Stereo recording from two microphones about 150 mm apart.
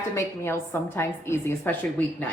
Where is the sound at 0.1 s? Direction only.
15° left (ahead or behind).